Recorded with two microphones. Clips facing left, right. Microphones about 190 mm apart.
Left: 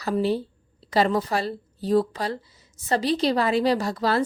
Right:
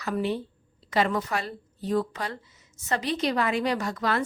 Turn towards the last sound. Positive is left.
turn(degrees=35)  # may be behind; listen again after turning